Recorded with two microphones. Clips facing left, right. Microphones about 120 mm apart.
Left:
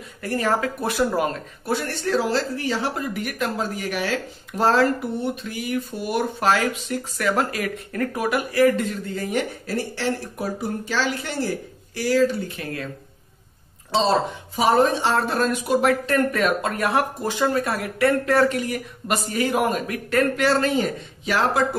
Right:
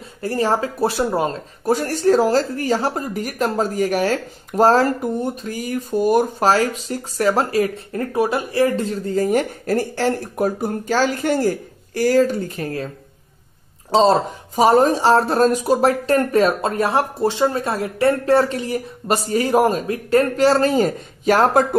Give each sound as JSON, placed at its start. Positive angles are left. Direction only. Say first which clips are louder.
{"t": 0.2, "sound": "speech", "louder": "right 3 dB", "side_deg": -30}
{"t": 1.7, "sound": "speech", "louder": "right 7 dB", "side_deg": -40}
{"t": 13.9, "sound": "speech", "louder": "right 5 dB", "side_deg": -40}